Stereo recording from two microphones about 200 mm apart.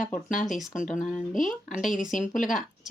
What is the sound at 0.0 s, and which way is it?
Speech, 40° left (ahead or behind).